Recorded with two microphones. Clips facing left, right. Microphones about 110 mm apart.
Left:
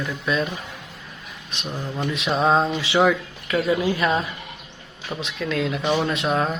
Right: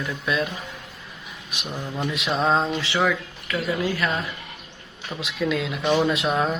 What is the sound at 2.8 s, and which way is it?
Speech, 15° left (ahead or behind).